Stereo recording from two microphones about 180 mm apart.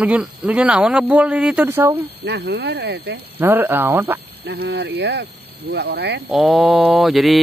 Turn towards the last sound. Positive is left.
turn(degrees=0)  # may be behind; listen again after turning